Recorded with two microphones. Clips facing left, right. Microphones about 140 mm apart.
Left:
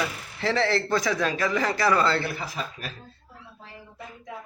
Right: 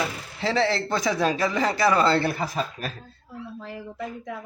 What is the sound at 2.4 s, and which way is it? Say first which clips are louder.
Speech: right 6 dB; 45° right (ahead or behind).